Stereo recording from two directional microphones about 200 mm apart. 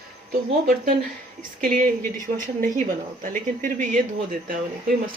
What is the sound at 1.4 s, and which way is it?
A woman's voice, 45° right (ahead or behind).